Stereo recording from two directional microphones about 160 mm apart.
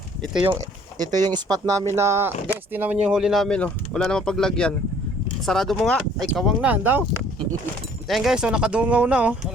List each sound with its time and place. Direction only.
0.9 s speech: 25° right (ahead or behind)
8.0 s speech: centre (ahead or behind)